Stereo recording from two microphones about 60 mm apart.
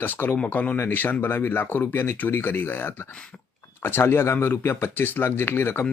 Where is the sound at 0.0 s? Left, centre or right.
Left.